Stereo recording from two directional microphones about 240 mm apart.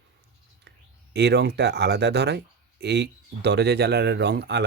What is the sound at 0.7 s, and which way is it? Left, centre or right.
Whispering, right.